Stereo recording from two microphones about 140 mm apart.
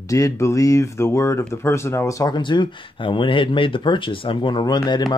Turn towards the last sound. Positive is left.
turn(degrees=30)  # may be behind; listen again after turning